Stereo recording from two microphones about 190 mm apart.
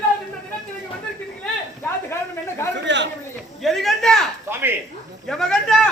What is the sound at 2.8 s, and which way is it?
Speech, 70° right (ahead or behind).